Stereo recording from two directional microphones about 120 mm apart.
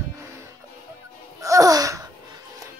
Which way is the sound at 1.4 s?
25° right (ahead or behind).